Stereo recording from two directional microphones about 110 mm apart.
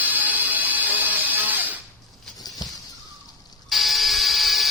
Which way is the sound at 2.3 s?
35° left (ahead or behind).